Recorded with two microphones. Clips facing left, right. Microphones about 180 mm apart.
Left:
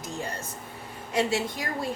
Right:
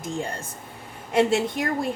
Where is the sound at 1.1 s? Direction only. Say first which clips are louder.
Right 6 dB; 55° right (ahead or behind).